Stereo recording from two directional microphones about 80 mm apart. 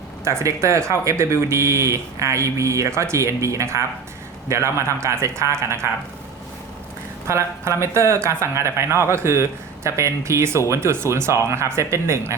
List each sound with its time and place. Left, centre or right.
0.3 s speech: right
7.3 s speech: right